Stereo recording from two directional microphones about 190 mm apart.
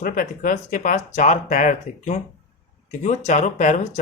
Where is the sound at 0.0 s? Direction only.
45° left (ahead or behind).